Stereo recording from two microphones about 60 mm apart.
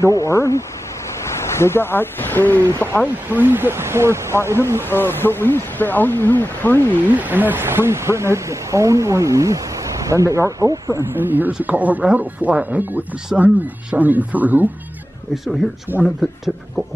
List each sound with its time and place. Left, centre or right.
0.0 s speech: left
1.6 s speech: left
3.3 s speech: right
4.8 s speech: left
7.1 s speech: right
11.1 s speech: right
13.3 s speech: centre
13.9 s speech: right
15.3 s speech: centre